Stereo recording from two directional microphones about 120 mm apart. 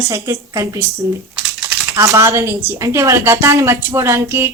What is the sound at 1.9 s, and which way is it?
A woman's voice, 25° right (ahead or behind).